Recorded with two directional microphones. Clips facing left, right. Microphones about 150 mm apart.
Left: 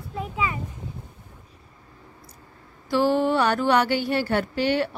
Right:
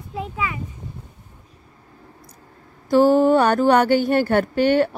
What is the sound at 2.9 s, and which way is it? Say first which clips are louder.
Speech: right 7 dB; 45° right (ahead or behind).